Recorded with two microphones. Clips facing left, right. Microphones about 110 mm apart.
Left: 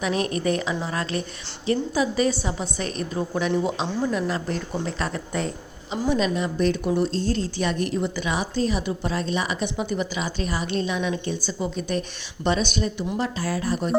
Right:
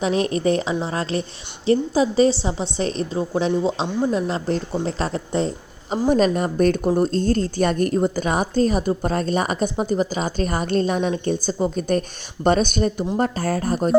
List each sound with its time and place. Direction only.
0.0 s a woman's voice: 30° right (ahead or behind)
6.1 s a woman's voice: 45° right (ahead or behind)